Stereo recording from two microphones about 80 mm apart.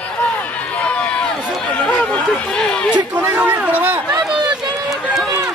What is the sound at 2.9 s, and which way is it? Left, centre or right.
A man's voice, centre.